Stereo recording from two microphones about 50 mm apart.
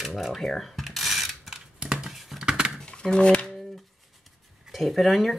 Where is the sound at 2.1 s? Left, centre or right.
Centre.